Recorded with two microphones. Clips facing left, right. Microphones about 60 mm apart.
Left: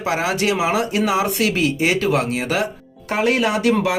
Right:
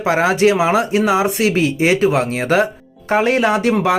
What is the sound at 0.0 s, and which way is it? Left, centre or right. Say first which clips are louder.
Speech: right 6 dB; right.